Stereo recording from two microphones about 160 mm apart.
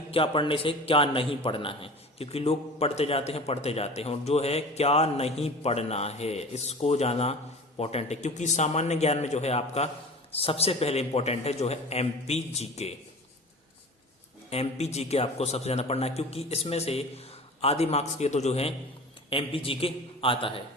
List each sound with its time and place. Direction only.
0.1 s a man's voice: 35° left (ahead or behind)
14.5 s a man's voice: 40° left (ahead or behind)